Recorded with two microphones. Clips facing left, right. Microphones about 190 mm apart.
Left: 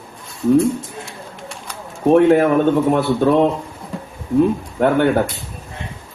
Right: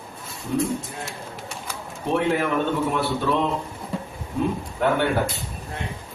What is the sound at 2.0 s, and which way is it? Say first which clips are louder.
Speech: left 11 dB; 50° left (ahead or behind).